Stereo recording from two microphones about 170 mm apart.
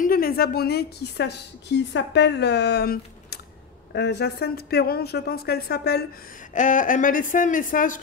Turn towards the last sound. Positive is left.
turn(degrees=50)  # may be behind; listen again after turning